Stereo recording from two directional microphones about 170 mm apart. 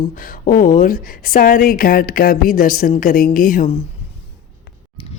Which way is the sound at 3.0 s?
55° left (ahead or behind).